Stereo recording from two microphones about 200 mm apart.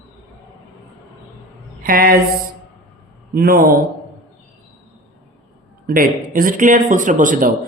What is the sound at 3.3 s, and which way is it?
Speech, 45° right (ahead or behind).